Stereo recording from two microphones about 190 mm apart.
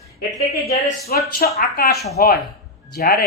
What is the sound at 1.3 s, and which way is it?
Mantra, 50° left (ahead or behind).